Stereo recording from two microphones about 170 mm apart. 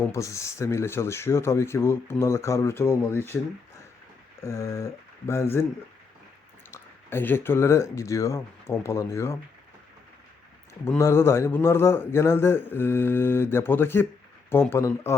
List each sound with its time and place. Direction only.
0.1 s speech: 15° left (ahead or behind)
4.4 s speech: 20° left (ahead or behind)
6.7 s speech: 15° left (ahead or behind)
10.8 s speech: 15° left (ahead or behind)